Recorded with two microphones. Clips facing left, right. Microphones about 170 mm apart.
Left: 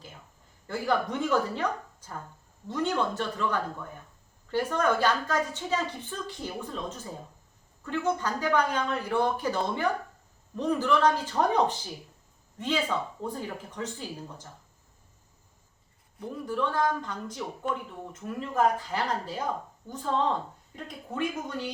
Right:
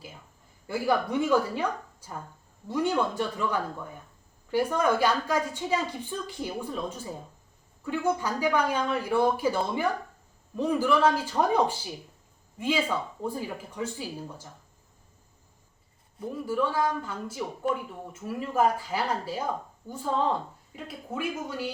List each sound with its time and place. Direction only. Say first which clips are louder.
0.7 s speech: right 2 dB; 10° right (ahead or behind)
16.5 s speech: right 1 dB; 5° right (ahead or behind)